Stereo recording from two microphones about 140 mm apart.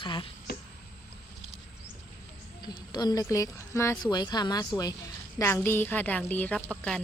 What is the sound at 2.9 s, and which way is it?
Speech, 30° left (ahead or behind).